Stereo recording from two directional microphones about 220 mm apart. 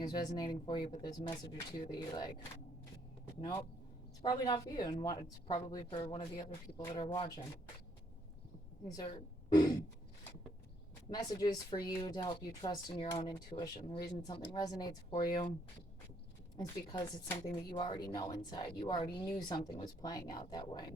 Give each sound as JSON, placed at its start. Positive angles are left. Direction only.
{"t": 0.0, "sound": "a woman's voice", "side_deg": 20}
{"t": 4.2, "sound": "a woman's voice", "side_deg": 20}
{"t": 8.9, "sound": "speech", "side_deg": 20}
{"t": 11.1, "sound": "a woman's voice", "side_deg": 20}
{"t": 16.6, "sound": "a woman's voice", "side_deg": 20}